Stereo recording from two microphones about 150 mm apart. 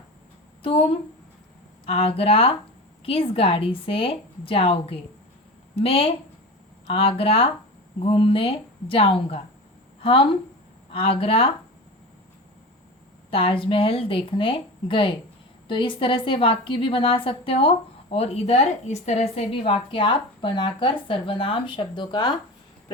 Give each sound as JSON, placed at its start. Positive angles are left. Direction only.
{"t": 0.6, "sound": "a woman's voice", "side_deg": 40}
{"t": 13.3, "sound": "a woman's voice", "side_deg": 35}